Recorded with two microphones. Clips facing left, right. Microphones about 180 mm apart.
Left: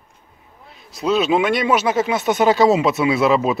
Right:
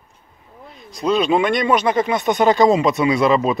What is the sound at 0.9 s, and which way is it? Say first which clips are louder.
Speech: even; 5° left (ahead or behind).